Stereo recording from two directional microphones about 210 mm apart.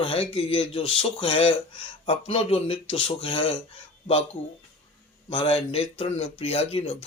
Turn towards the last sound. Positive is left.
turn(degrees=30)  # may be behind; listen again after turning